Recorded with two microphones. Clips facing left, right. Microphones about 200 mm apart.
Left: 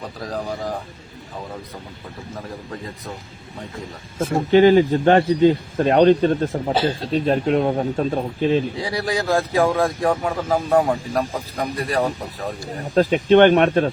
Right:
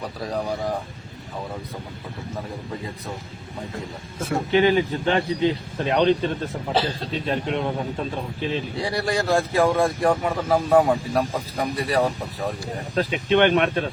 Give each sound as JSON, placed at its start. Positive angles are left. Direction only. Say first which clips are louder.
{"t": 4.5, "sound": "a man's voice", "louder": "left 7 dB", "side_deg": 45}
{"t": 8.7, "sound": "speech", "louder": "left 1 dB", "side_deg": 0}
{"t": 12.9, "sound": "a man's voice", "louder": "left 7 dB", "side_deg": 45}